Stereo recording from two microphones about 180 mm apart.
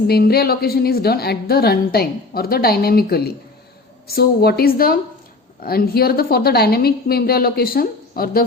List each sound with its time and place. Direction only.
0.1 s a woman's voice: 60° left (ahead or behind)